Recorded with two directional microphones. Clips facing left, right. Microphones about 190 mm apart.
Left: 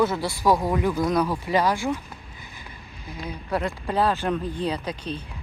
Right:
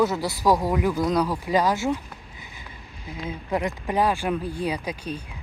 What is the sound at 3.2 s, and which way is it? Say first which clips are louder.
Speech: right 1 dB; 20° right (ahead or behind).